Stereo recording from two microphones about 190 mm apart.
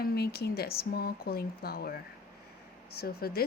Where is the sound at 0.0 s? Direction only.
55° left (ahead or behind).